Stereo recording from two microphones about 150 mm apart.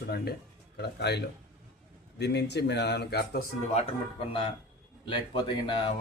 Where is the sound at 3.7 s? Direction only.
40° left (ahead or behind).